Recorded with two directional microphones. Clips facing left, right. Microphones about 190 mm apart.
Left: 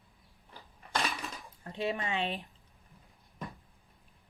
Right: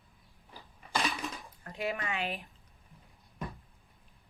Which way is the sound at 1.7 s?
30° left (ahead or behind).